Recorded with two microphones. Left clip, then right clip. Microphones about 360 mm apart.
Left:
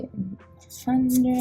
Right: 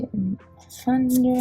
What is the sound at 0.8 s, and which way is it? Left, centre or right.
Speech, right.